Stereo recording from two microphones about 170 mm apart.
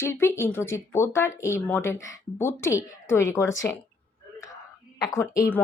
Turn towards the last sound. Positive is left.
turn(degrees=15)  # may be behind; listen again after turning